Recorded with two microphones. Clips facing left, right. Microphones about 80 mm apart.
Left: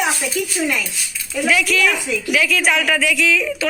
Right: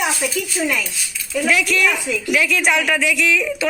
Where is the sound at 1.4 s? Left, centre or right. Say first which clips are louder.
Left 1 dB; centre.